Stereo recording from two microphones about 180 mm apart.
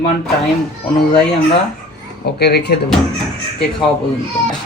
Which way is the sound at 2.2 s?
65° left (ahead or behind).